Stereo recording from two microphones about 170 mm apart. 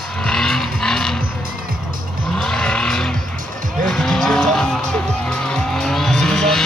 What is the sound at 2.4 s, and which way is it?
Vehicle, 5° left (ahead or behind).